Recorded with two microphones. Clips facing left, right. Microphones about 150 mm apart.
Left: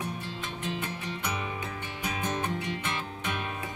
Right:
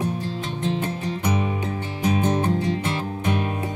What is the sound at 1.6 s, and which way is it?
Music, 30° right (ahead or behind).